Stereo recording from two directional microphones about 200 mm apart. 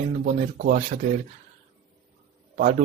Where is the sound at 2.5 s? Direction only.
40° right (ahead or behind).